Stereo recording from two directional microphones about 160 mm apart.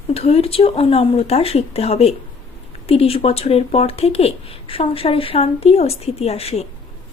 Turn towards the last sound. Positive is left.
turn(degrees=40)  # may be behind; listen again after turning